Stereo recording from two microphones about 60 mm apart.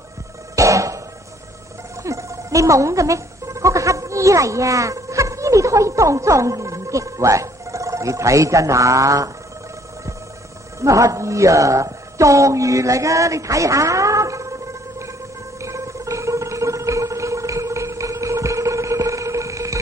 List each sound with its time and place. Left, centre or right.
0.6 s cough: right
2.0 s speech: right
10.8 s a woman's voice: right
15.6 s gargling: right